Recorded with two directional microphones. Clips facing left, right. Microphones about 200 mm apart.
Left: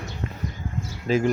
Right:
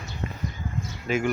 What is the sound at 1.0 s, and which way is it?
Speech, 30° left (ahead or behind).